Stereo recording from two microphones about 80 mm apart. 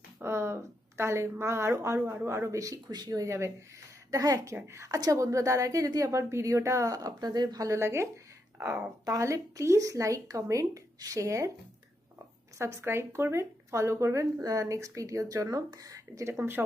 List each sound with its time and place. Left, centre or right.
0.2 s a woman's voice: right
12.5 s a woman's voice: right
16.4 s a woman's voice: right